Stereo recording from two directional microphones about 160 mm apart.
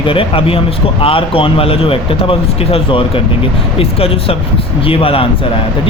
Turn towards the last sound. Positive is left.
turn(degrees=35)  # may be behind; listen again after turning